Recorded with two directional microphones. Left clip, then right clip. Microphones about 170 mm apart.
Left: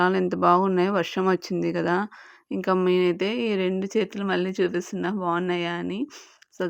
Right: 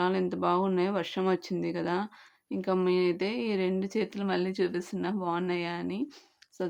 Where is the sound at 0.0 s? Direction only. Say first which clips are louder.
Left 7 dB; 35° left (ahead or behind).